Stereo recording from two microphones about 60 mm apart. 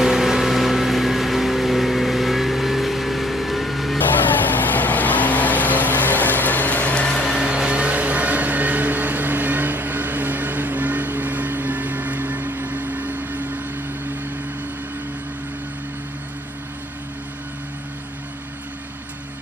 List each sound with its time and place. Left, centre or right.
0.0 s vehicle: centre
4.5 s vehicle: left
7.0 s vehicle: centre
7.3 s vehicle: centre; by 12.5 s right
12.5 s a sound: right